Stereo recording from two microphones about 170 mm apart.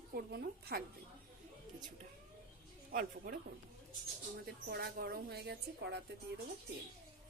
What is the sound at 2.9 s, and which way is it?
A woman's voice, 60° right (ahead or behind).